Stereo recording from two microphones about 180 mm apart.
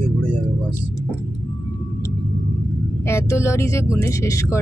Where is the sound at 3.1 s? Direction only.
15° left (ahead or behind).